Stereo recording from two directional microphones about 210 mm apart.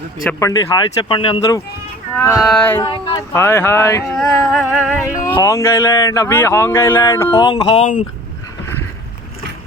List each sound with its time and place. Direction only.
0.3 s speech: 15° left (ahead or behind)
4.2 s music: centre (ahead or behind)
5.2 s speech: 15° left (ahead or behind); by 7.9 s 30° left (ahead or behind)